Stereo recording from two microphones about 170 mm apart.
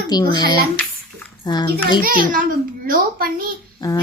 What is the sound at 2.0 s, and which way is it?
A child's voice, 55° right (ahead or behind).